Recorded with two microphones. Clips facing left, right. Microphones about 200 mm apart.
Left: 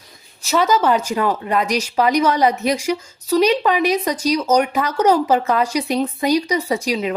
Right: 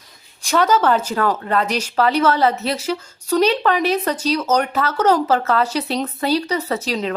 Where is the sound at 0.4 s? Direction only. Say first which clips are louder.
Even; 10° left (ahead or behind).